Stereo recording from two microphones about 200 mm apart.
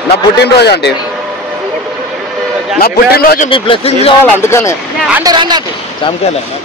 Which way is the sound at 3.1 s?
45° left (ahead or behind).